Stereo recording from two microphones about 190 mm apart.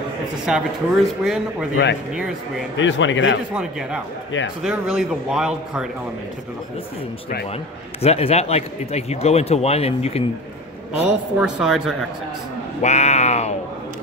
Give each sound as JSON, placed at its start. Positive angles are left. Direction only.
{"t": 0.5, "sound": "speech", "side_deg": 0}
{"t": 2.8, "sound": "a man's voice", "side_deg": 80}
{"t": 4.6, "sound": "speech", "side_deg": -5}
{"t": 8.0, "sound": "speech", "side_deg": 35}
{"t": 11.1, "sound": "speech", "side_deg": -5}
{"t": 12.8, "sound": "speech", "side_deg": 35}